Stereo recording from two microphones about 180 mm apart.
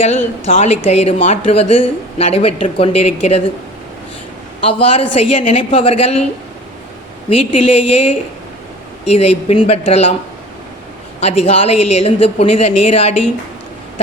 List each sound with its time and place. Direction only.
0.4 s speech: 35° left (ahead or behind)
4.6 s speech: 30° left (ahead or behind)
7.3 s speech: 30° left (ahead or behind)
11.2 s speech: 35° left (ahead or behind)